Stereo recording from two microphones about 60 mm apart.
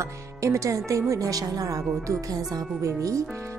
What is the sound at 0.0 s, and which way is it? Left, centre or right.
Speech, right.